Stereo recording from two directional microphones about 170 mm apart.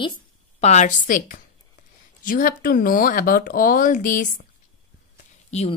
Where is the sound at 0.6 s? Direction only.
45° left (ahead or behind).